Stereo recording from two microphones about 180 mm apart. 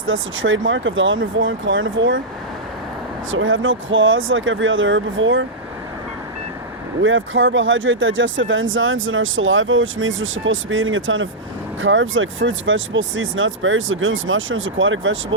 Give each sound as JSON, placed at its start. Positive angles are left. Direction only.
{"t": 0.0, "sound": "speech", "side_deg": -90}
{"t": 3.3, "sound": "speech", "side_deg": -90}
{"t": 7.0, "sound": "speech", "side_deg": -90}